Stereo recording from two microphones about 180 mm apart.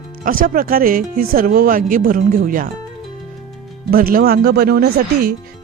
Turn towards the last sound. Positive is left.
turn(degrees=-60)  # may be behind; listen again after turning